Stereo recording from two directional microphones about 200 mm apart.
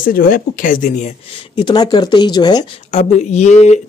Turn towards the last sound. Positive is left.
turn(degrees=35)  # may be behind; listen again after turning